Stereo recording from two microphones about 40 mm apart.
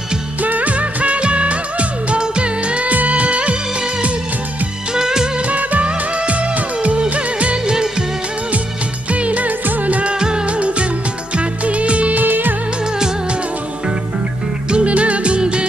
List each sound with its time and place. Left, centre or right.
0.4 s music of bollywood: right
4.9 s music: centre
5.5 s music: right
5.9 s music of bollywood: right
9.1 s music of bollywood: right
9.7 s music: right
10.1 s music: right
12.2 s music: right
14.7 s music: right